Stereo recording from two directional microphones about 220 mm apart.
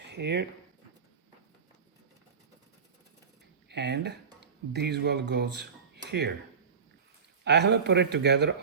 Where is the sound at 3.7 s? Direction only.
50° right (ahead or behind).